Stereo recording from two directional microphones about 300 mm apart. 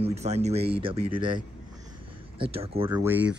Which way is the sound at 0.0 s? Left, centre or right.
Right.